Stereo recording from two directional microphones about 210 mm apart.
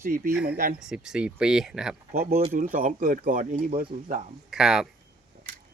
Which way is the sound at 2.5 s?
40° right (ahead or behind).